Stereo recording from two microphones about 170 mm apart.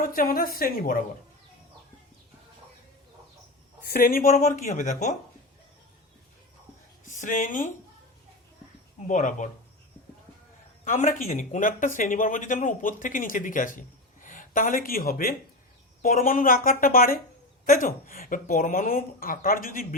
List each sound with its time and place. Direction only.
0.0 s a woman's voice: 55° left (ahead or behind)
3.8 s speech: 60° left (ahead or behind)
7.0 s speech: 50° left (ahead or behind)
9.0 s speech: 45° left (ahead or behind)
10.8 s a woman's voice: 50° left (ahead or behind)